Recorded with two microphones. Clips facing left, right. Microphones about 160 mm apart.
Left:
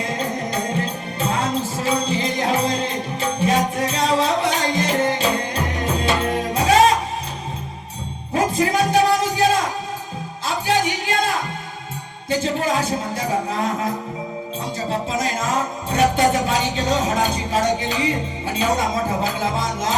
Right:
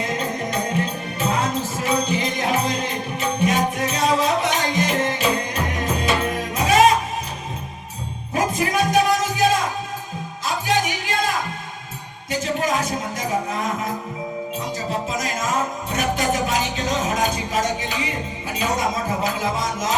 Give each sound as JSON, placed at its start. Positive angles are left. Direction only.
{"t": 1.2, "sound": "music", "side_deg": 30}
{"t": 8.3, "sound": "music", "side_deg": 30}
{"t": 10.4, "sound": "music", "side_deg": 30}
{"t": 12.3, "sound": "music", "side_deg": 30}
{"t": 14.8, "sound": "music", "side_deg": 30}